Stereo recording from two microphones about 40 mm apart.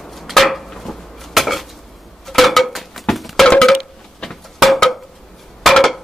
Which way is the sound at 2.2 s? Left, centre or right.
Centre.